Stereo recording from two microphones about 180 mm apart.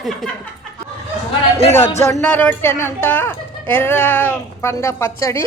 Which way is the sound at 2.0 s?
15° left (ahead or behind).